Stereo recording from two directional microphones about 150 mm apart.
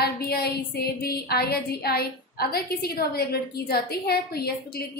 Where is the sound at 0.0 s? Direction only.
90° left.